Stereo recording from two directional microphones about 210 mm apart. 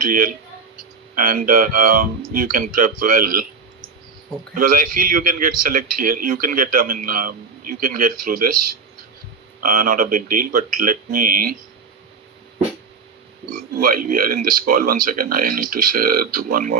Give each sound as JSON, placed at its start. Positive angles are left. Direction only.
{"t": 0.0, "sound": "a man's voice", "side_deg": -40}
{"t": 4.5, "sound": "a man's voice", "side_deg": -40}
{"t": 13.5, "sound": "speech", "side_deg": -40}